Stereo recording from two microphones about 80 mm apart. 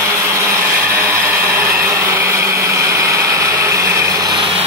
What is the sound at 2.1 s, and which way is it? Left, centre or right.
Vehicle, right.